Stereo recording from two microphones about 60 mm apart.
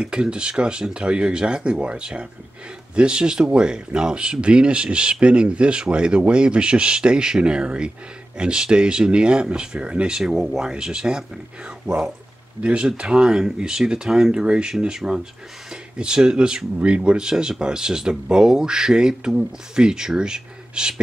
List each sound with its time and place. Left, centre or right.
0.0 s speech: centre